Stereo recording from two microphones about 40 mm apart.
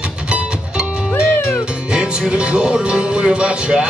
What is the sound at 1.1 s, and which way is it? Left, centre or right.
Music, left.